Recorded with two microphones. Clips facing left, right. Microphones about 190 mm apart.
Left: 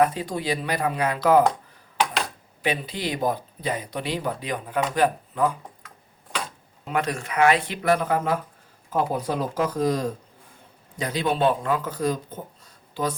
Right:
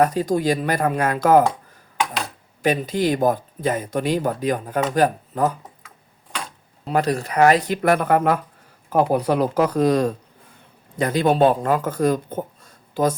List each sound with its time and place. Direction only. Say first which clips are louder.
0.0 s speech: right 4 dB; 40° right (ahead or behind)
2.6 s speech: right 7 dB; 45° right (ahead or behind)
6.8 s speech: right 5 dB; 35° right (ahead or behind); by 10.1 s 70° right (ahead or behind)
10.9 s speech: right 7 dB; 50° right (ahead or behind)
12.6 s a sound: right 6 dB; 45° right (ahead or behind)